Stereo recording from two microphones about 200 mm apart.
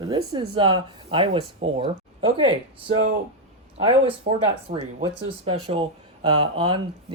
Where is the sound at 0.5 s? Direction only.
25° right (ahead or behind).